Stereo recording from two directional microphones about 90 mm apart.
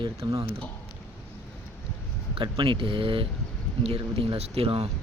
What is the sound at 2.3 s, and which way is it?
Speech, 70° right (ahead or behind).